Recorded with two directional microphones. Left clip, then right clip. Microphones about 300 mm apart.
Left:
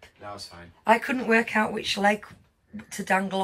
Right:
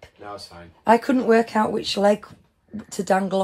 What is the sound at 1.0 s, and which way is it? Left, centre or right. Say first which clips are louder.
Speech: right 5 dB; centre.